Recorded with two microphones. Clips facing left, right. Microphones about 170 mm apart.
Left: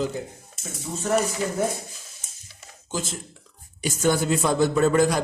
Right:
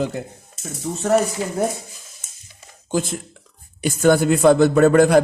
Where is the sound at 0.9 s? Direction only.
75° right (ahead or behind).